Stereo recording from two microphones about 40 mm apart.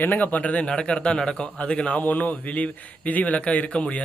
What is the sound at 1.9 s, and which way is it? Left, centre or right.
A man's voice, left.